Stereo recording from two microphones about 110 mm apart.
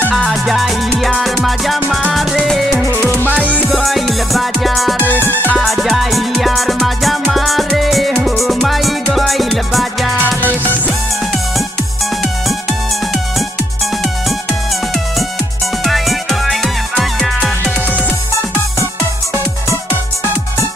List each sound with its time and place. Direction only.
0.1 s music: centre (ahead or behind)
3.2 s music: 15° left (ahead or behind)
3.7 s music: centre (ahead or behind)
5.2 s music: 15° left (ahead or behind)
5.6 s music: centre (ahead or behind)
15.8 s music: centre (ahead or behind)